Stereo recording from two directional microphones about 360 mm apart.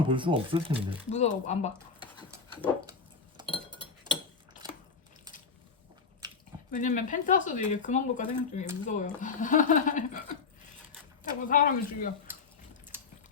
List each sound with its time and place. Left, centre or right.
0.0 s speech: centre
1.1 s speech: centre
3.4 s chink: centre
6.7 s speech: centre